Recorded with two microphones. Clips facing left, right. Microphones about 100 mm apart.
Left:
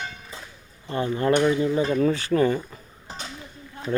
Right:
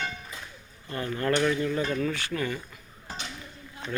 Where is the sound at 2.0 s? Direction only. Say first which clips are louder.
Left 9 dB; 35° left (ahead or behind).